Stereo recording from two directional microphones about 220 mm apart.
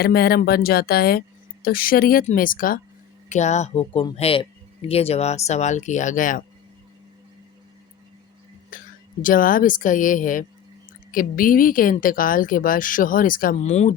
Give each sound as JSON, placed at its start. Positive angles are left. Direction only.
{"t": 0.0, "sound": "speech", "side_deg": 45}
{"t": 8.7, "sound": "whispering", "side_deg": 40}
{"t": 9.2, "sound": "speech", "side_deg": 40}